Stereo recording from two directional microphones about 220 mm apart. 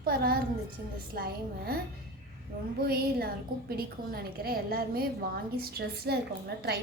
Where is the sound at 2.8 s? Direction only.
45° right (ahead or behind).